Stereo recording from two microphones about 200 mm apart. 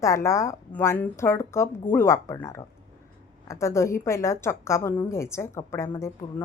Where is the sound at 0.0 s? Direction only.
15° left (ahead or behind).